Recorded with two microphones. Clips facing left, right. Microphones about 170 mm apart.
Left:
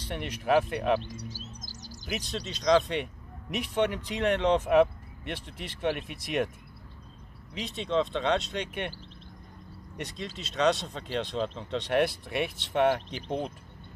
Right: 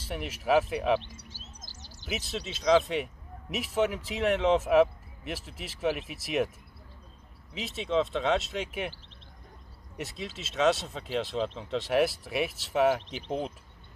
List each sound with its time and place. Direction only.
0.0 s a man's voice: 5° right (ahead or behind)
1.0 s speech: 40° left (ahead or behind)
1.6 s bird: 40° left (ahead or behind)
2.0 s a man's voice: 5° right (ahead or behind)
7.5 s a man's voice: 5° right (ahead or behind)
9.9 s a man's voice: 5° right (ahead or behind)